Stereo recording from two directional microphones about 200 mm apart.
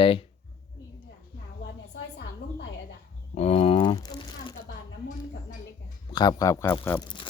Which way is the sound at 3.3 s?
30° left (ahead or behind).